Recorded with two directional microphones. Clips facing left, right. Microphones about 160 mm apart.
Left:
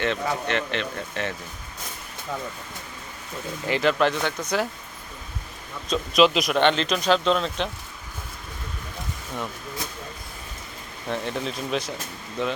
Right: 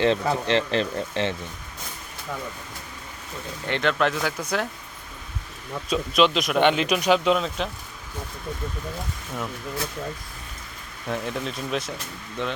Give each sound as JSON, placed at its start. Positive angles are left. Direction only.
{"t": 0.0, "sound": "speech", "side_deg": -30}
{"t": 3.7, "sound": "speech", "side_deg": 5}
{"t": 5.9, "sound": "speech", "side_deg": 0}
{"t": 6.6, "sound": "speech", "side_deg": -10}
{"t": 11.1, "sound": "speech", "side_deg": 0}